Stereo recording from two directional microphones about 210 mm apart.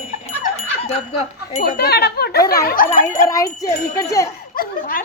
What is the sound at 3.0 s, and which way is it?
A child's voice, 15° left (ahead or behind).